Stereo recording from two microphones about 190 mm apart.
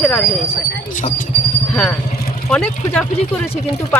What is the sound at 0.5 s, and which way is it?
Speech, 45° left (ahead or behind).